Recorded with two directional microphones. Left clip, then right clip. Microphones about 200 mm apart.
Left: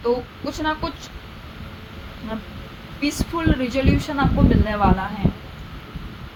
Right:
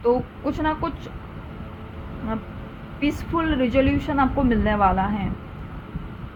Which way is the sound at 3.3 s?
45° right (ahead or behind).